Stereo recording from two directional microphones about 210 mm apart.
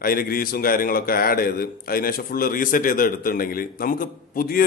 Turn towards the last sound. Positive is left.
turn(degrees=45)  # may be behind; listen again after turning